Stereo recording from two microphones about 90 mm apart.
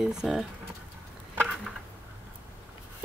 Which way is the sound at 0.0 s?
5° right (ahead or behind).